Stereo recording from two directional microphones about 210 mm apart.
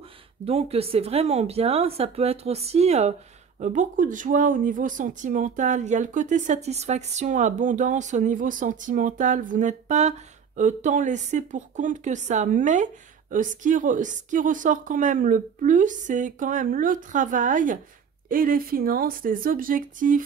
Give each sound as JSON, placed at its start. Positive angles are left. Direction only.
{"t": 0.5, "sound": "speech", "side_deg": -30}